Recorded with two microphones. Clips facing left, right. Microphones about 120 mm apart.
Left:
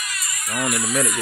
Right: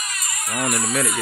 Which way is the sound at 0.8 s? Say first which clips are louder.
Even; 30° right (ahead or behind).